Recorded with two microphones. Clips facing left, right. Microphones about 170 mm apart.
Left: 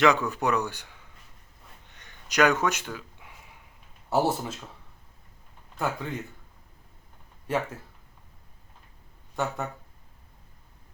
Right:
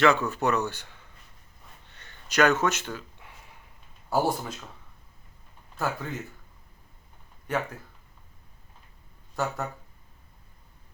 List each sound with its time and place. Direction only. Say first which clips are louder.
0.0 s a man's voice: even; 15° left (ahead or behind)
1.9 s a sound: even; 15° left (ahead or behind)
4.1 s speech: left 1 dB; centre (ahead or behind)
5.7 s speech: even; centre (ahead or behind)
7.4 s speech: left 1 dB; 30° left (ahead or behind)
9.3 s speech: even; centre (ahead or behind)